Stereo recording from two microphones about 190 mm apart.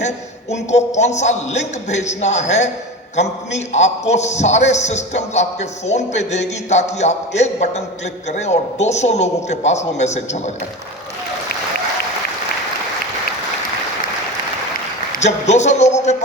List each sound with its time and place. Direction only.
0.5 s a man's voice: 35° left (ahead or behind)
3.7 s a man's voice: 35° left (ahead or behind)
15.1 s a man's voice: 35° left (ahead or behind)